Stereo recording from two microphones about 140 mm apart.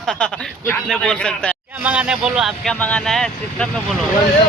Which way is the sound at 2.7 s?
10° left (ahead or behind).